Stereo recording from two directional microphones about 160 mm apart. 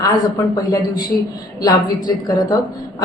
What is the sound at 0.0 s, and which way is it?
A woman's voice, 25° left (ahead or behind).